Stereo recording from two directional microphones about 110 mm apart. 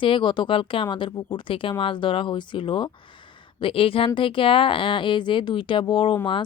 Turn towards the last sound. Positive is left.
turn(degrees=45)  # may be behind; listen again after turning